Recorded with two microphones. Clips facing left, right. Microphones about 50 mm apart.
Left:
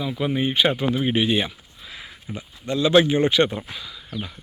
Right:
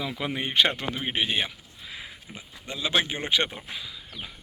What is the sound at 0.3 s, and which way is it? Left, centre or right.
Speech, right.